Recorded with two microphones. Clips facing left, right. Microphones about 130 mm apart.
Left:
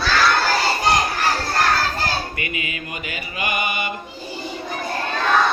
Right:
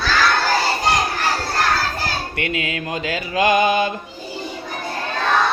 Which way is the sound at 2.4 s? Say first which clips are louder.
Right 5 dB; 85° right.